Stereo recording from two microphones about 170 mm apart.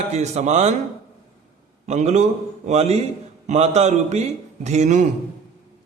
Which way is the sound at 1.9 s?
40° right (ahead or behind).